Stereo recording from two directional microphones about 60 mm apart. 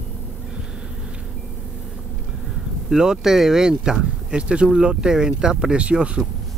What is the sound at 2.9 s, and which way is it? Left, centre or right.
Speech, centre.